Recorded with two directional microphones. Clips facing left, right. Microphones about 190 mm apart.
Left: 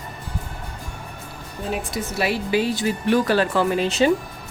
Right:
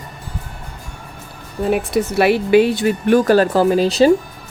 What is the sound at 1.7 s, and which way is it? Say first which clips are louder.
Speech: right 10 dB; 65° right (ahead or behind).